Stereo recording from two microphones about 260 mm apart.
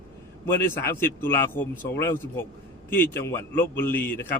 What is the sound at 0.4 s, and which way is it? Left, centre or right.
A man's voice, centre.